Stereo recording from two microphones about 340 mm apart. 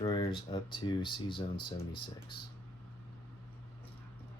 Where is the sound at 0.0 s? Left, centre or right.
Centre.